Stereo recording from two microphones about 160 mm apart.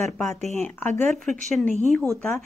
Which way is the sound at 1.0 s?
Centre (ahead or behind).